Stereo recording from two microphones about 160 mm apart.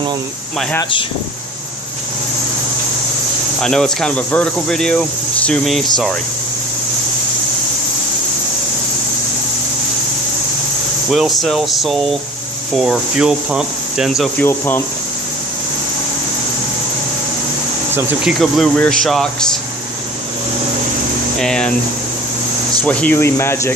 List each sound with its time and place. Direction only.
3.6 s speech: 5° left (ahead or behind)
11.1 s speech: centre (ahead or behind)
14.4 s speech: 15° left (ahead or behind)
18.4 s speech: centre (ahead or behind)
21.4 s speech: 5° left (ahead or behind)
22.8 s speech: 10° left (ahead or behind)